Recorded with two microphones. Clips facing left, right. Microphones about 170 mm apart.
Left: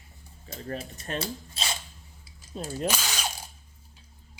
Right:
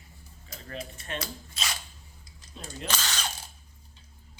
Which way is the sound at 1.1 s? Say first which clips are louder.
Left 4 dB; 30° left (ahead or behind).